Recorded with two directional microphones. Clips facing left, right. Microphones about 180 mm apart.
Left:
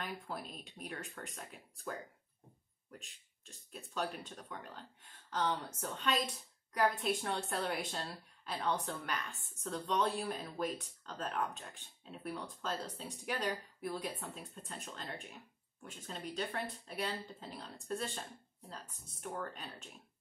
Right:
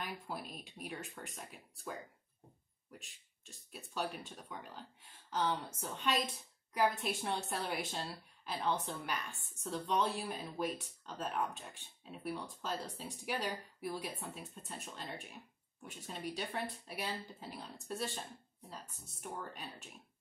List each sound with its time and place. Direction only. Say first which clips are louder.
0.0 s speech: even; 5° right (ahead or behind)
19.3 s speech: left 3 dB; 10° right (ahead or behind)